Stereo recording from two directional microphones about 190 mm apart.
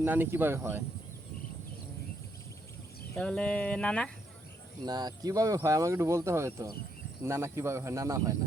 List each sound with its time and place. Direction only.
0.0 s speech: 10° right (ahead or behind)
3.2 s speech: 5° left (ahead or behind)
4.9 s speech: 20° right (ahead or behind)